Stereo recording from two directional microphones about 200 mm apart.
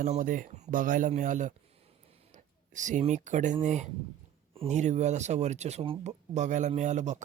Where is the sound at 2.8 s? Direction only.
40° right (ahead or behind).